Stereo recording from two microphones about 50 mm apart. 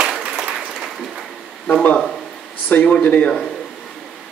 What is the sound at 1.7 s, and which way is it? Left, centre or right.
A man's voice, left.